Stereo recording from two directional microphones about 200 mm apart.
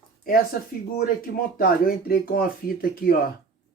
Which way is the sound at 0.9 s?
45° left (ahead or behind).